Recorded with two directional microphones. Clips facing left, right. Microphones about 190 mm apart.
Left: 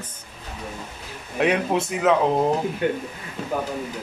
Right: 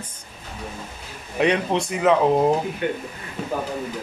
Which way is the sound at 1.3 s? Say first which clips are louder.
Right 1 dB; 5° left (ahead or behind).